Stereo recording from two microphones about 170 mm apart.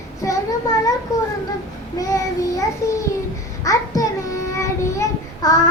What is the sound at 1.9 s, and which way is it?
Child singing, 20° left (ahead or behind).